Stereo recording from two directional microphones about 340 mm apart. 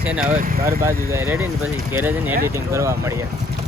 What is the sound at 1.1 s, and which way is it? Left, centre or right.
Speech, centre.